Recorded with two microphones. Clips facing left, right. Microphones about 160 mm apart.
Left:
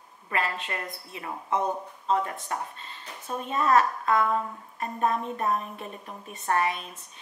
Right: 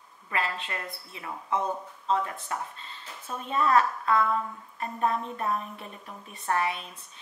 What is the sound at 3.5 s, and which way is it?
A woman's voice, 40° left (ahead or behind).